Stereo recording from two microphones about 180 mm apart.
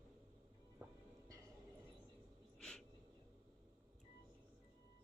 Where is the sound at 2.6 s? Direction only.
5° left (ahead or behind).